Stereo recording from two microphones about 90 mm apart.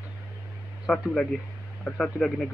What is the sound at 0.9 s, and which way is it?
Speech, 5° left (ahead or behind).